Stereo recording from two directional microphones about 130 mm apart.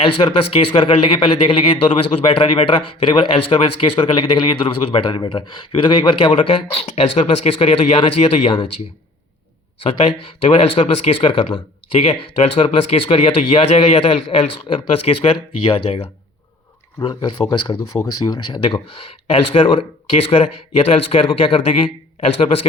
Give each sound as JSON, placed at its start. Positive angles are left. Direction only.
{"t": 0.0, "sound": "speech", "side_deg": 40}
{"t": 9.8, "sound": "speech", "side_deg": 40}